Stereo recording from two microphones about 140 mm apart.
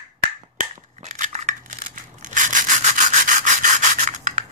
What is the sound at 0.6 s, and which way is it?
Scissors, 65° right (ahead or behind).